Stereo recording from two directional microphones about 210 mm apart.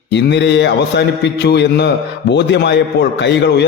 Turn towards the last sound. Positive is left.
turn(degrees=55)  # may be behind; listen again after turning